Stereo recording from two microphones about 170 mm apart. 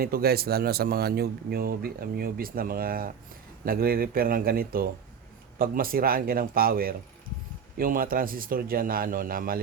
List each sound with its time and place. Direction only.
0.0 s speech: 60° right (ahead or behind)